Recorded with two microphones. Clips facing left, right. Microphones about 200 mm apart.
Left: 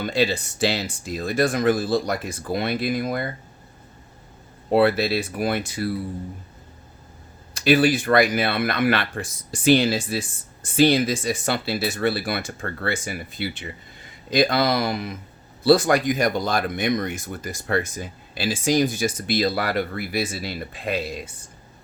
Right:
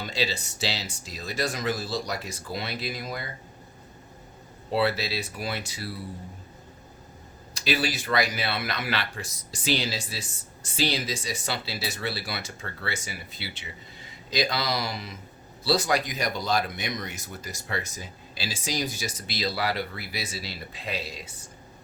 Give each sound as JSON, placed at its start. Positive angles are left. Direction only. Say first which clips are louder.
{"t": 0.0, "sound": "speech", "louder": "left 8 dB", "side_deg": 55}
{"t": 4.7, "sound": "speech", "louder": "left 8 dB", "side_deg": 55}
{"t": 7.5, "sound": "speech", "louder": "left 10 dB", "side_deg": 55}